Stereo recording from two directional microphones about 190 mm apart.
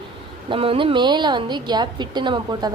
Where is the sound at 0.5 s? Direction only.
30° right (ahead or behind).